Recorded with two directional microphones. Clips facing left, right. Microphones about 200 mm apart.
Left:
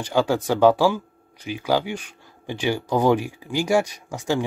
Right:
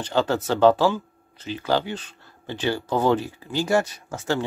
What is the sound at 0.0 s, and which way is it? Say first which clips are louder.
Speech: left 2 dB; 10° left (ahead or behind).